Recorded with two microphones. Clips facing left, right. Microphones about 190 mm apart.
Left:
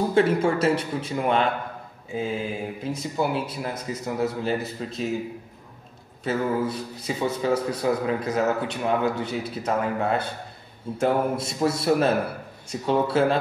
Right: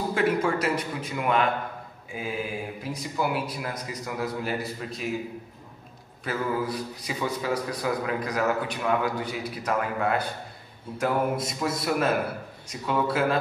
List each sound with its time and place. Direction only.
0.1 s a man's voice: 30° left (ahead or behind)
6.2 s a man's voice: 25° left (ahead or behind)